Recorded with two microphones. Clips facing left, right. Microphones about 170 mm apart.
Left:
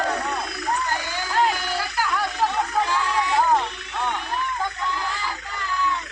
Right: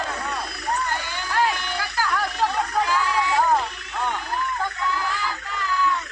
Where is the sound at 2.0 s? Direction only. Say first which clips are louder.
Right 1 dB; 10° left (ahead or behind).